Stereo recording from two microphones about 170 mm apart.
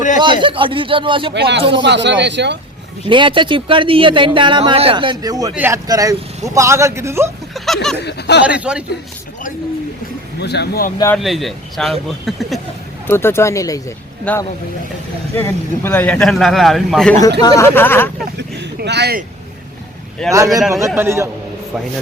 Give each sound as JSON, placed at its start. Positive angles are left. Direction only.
{"t": 0.4, "sound": "speech", "side_deg": -30}
{"t": 1.3, "sound": "speech", "side_deg": -80}
{"t": 3.1, "sound": "a man's voice", "side_deg": -30}
{"t": 7.5, "sound": "a sound", "side_deg": 0}
{"t": 8.0, "sound": "speech", "side_deg": 85}
{"t": 8.4, "sound": "speech", "side_deg": -5}
{"t": 10.4, "sound": "speech", "side_deg": 75}
{"t": 11.2, "sound": "speech", "side_deg": 0}
{"t": 13.1, "sound": "speech", "side_deg": 15}
{"t": 14.3, "sound": "speech", "side_deg": 10}
{"t": 17.4, "sound": "speech", "side_deg": 20}
{"t": 18.3, "sound": "a sound", "side_deg": -75}
{"t": 20.3, "sound": "a man's voice", "side_deg": -20}